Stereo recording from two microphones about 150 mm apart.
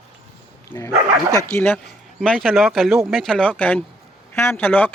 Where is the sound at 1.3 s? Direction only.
20° left (ahead or behind).